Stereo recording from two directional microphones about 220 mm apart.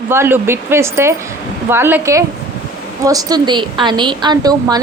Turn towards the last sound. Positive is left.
turn(degrees=-15)  # may be behind; listen again after turning